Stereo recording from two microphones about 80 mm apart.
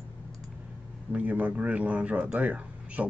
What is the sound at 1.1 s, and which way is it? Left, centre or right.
A man's voice, right.